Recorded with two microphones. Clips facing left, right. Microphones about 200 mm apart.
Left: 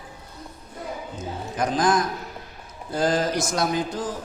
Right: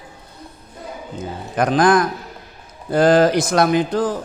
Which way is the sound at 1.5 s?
65° right (ahead or behind).